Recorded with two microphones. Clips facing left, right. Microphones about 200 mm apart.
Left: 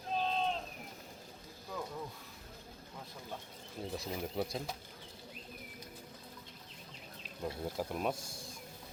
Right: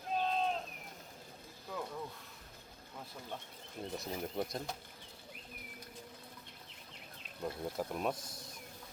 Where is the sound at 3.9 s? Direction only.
Centre (ahead or behind).